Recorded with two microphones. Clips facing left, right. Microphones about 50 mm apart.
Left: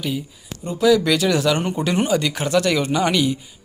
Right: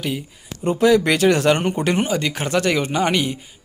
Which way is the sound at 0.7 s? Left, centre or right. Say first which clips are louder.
Right 1 dB; right.